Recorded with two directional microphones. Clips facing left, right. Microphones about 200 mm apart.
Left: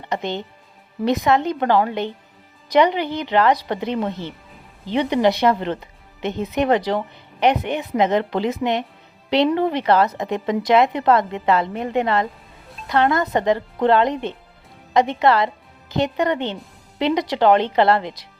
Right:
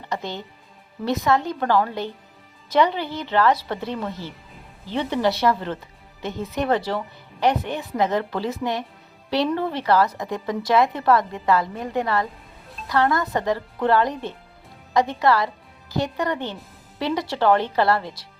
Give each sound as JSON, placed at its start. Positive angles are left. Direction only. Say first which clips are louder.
{"t": 0.1, "sound": "speech", "louder": "left 5 dB", "side_deg": 20}